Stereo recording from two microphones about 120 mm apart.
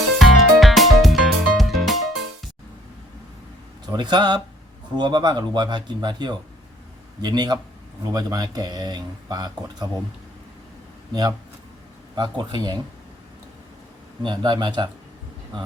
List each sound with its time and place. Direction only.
0.2 s music: centre (ahead or behind)
3.8 s speech: 40° right (ahead or behind)
11.1 s speech: 35° right (ahead or behind)
14.2 s speech: 35° right (ahead or behind)